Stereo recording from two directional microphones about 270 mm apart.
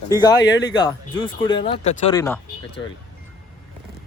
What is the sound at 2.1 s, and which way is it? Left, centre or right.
Speech, centre.